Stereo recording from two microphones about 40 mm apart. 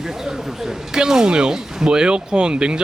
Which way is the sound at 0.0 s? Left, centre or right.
Centre.